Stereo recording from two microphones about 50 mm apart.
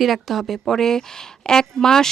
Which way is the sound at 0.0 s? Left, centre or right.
Centre.